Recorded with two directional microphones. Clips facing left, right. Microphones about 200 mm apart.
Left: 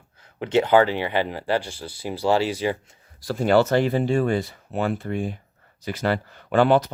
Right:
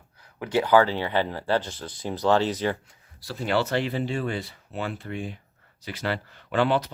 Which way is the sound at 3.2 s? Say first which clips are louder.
Left 7 dB; 45° left (ahead or behind).